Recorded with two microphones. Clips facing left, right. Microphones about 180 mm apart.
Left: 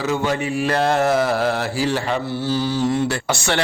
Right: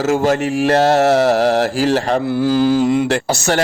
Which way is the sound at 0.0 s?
45° right (ahead or behind).